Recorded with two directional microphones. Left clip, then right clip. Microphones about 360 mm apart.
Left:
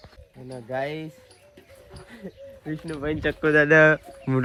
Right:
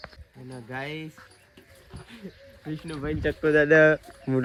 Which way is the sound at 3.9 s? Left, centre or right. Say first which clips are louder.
Left 1 dB; left.